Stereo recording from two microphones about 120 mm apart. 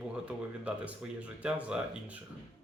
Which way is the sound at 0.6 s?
10° right (ahead or behind).